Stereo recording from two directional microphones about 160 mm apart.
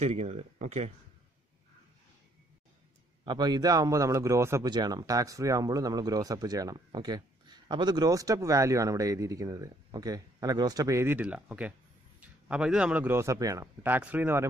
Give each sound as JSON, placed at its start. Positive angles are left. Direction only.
{"t": 0.0, "sound": "speech", "side_deg": -45}
{"t": 3.3, "sound": "speech", "side_deg": -25}